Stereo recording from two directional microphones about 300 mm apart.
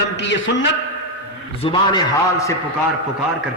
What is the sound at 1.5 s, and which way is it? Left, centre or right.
A man's voice, centre.